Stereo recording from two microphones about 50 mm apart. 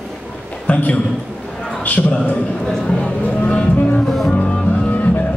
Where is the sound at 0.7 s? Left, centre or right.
Left.